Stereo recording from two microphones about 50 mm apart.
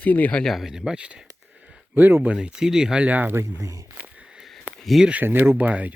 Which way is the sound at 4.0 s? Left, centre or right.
Centre.